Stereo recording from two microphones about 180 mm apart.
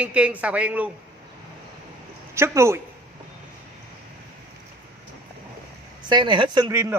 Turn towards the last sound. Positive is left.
turn(degrees=-15)  # may be behind; listen again after turning